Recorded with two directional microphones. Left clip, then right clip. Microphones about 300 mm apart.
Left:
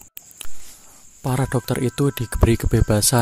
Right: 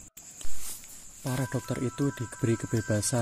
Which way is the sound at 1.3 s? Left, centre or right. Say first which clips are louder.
Left 10 dB; left.